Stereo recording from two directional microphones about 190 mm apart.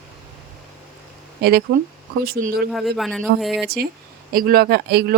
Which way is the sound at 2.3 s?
50° right (ahead or behind).